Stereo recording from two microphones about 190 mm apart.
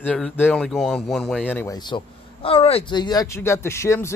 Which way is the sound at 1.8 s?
25° left (ahead or behind).